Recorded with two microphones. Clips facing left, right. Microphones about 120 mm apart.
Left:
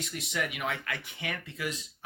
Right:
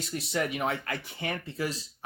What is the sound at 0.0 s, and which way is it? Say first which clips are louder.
Speech: right 4 dB; 35° right (ahead or behind).